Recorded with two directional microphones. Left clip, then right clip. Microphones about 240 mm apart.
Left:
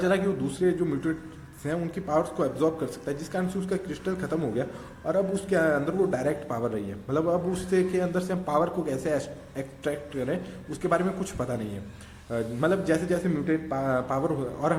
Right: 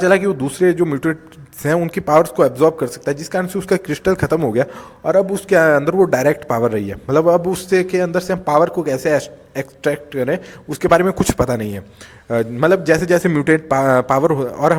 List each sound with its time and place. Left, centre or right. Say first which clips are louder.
0.6 s a man's voice: right 11 dB; right